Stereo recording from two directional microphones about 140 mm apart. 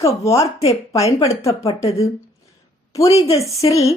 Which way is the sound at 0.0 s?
20° left (ahead or behind).